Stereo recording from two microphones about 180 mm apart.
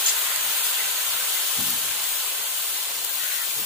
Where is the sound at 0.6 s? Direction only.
Centre (ahead or behind).